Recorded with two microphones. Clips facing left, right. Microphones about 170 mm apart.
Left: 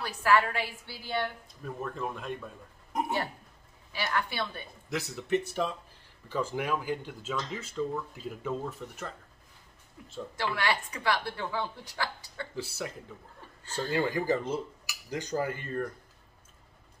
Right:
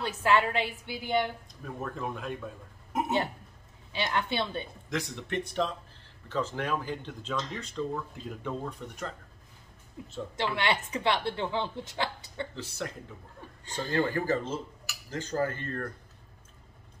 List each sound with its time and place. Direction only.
0.0 s a woman's voice: 20° right (ahead or behind)
1.8 s speech: centre (ahead or behind)
3.9 s a woman's voice: 20° right (ahead or behind)
4.8 s speech: 5° left (ahead or behind)
10.0 s a woman's voice: 20° right (ahead or behind)
12.5 s speech: 5° left (ahead or behind)